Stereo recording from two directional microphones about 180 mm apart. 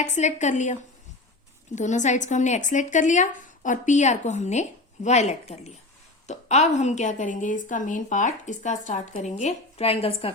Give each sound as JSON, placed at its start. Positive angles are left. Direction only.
{"t": 0.0, "sound": "a woman's voice", "side_deg": 40}